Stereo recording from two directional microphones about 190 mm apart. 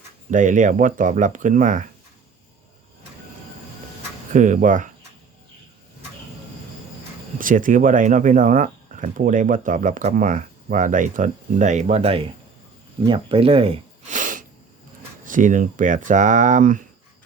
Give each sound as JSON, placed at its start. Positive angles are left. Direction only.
{"t": 0.3, "sound": "speech", "side_deg": -40}
{"t": 4.3, "sound": "speech", "side_deg": -40}
{"t": 7.3, "sound": "speech", "side_deg": -45}
{"t": 14.2, "sound": "a sound", "side_deg": -45}
{"t": 15.2, "sound": "speech", "side_deg": -45}